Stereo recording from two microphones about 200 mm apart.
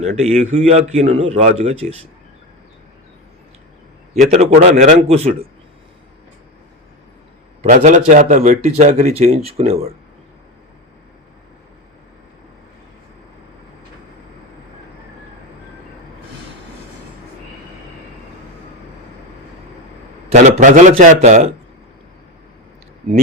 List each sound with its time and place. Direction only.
0.0 s a man's voice: 35° right (ahead or behind)
4.3 s a man's voice: 35° right (ahead or behind)
7.6 s a man's voice: 35° right (ahead or behind)
20.3 s a man's voice: 40° right (ahead or behind)